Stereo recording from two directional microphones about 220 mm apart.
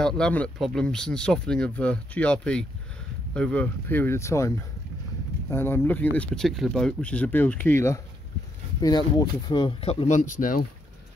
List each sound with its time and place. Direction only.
0.0 s speech: 5° left (ahead or behind); by 10.3 s 35° left (ahead or behind)